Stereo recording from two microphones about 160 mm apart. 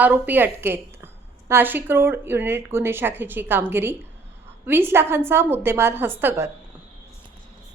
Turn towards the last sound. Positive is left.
turn(degrees=-15)  # may be behind; listen again after turning